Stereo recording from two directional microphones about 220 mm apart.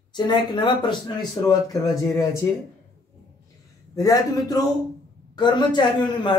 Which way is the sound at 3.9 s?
15° left (ahead or behind).